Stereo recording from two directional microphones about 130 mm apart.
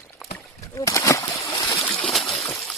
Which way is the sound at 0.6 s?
25° left (ahead or behind).